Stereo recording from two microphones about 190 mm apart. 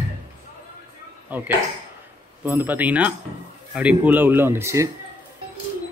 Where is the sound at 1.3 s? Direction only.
10° right (ahead or behind).